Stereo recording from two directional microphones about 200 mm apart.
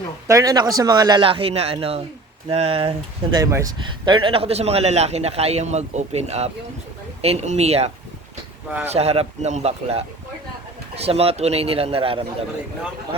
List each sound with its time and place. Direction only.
0.3 s speech: 15° right (ahead or behind)
3.3 s a man's voice: 15° right (ahead or behind); by 7.9 s 30° right (ahead or behind)
8.9 s a man's voice: 30° right (ahead or behind)